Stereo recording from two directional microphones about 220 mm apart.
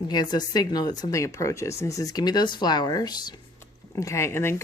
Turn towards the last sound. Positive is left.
turn(degrees=10)  # may be behind; listen again after turning